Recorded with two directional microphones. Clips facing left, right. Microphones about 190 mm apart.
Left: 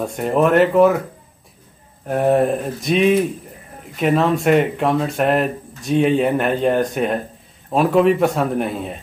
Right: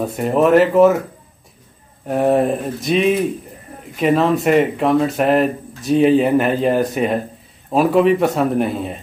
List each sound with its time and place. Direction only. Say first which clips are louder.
0.0 s speech: right 1 dB; centre (ahead or behind)
2.0 s speech: right 1 dB; centre (ahead or behind)